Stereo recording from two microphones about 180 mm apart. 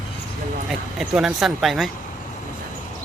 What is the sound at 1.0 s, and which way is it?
Speech, centre (ahead or behind).